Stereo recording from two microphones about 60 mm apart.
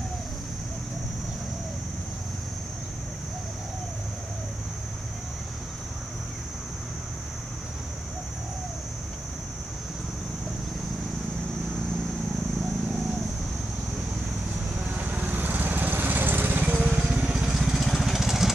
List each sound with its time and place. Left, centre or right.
14.9 s lawn mower: right
16.7 s vehicle: centre